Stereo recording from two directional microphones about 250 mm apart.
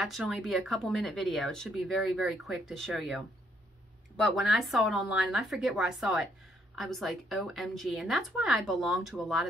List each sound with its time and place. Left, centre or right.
0.0 s speech: centre